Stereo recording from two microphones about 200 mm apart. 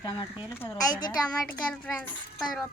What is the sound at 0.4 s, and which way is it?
Speech, 10° left (ahead or behind).